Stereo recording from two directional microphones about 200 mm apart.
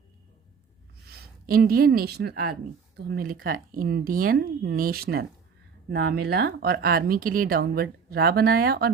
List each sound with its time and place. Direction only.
1.5 s speech: 50° right (ahead or behind)